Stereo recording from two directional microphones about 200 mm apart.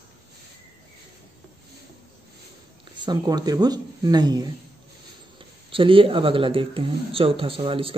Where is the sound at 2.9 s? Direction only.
20° right (ahead or behind).